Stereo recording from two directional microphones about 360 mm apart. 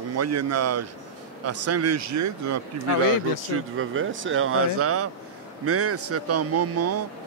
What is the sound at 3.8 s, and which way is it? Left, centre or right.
A man's voice, right.